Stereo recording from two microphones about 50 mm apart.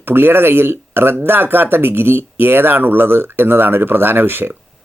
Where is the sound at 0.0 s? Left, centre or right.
Right.